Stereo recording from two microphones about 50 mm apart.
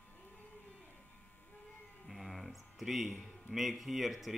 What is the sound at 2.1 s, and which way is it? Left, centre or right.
Speech, centre.